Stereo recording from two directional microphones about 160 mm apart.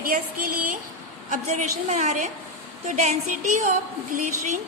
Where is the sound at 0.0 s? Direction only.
65° right (ahead or behind).